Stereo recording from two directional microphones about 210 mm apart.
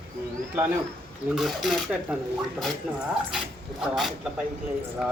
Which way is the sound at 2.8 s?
Centre (ahead or behind).